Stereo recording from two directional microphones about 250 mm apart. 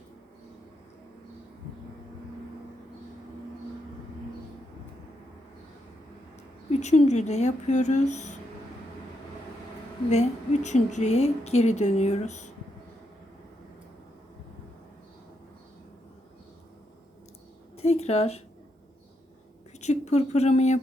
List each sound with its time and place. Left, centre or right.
6.7 s a woman's voice: left
10.1 s a woman's voice: left
17.7 s a sound: left
19.8 s speech: left